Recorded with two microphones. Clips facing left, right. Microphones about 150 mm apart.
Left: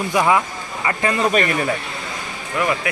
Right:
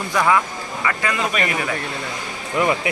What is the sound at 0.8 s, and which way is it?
Speech, 30° left (ahead or behind).